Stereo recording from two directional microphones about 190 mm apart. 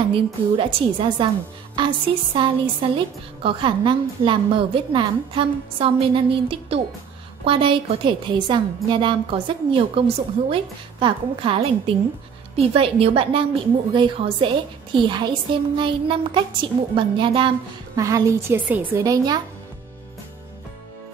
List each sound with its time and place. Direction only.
0.1 s a woman's voice: 30° right (ahead or behind)